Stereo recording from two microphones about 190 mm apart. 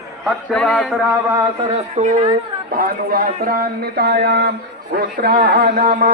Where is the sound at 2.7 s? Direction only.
50° right (ahead or behind).